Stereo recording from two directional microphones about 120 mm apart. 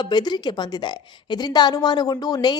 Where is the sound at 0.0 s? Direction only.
35° left (ahead or behind).